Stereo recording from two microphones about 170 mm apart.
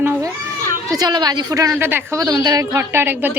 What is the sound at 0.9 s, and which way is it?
A woman's voice, 25° right (ahead or behind).